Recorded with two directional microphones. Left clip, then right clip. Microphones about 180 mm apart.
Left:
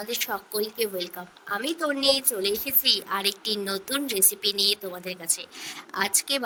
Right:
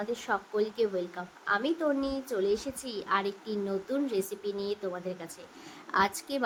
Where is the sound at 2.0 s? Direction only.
65° left (ahead or behind).